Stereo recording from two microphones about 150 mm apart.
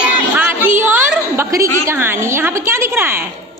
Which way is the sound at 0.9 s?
15° right (ahead or behind).